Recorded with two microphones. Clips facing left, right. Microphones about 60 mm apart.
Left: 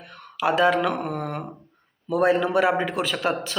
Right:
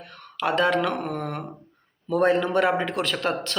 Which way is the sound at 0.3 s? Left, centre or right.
Centre.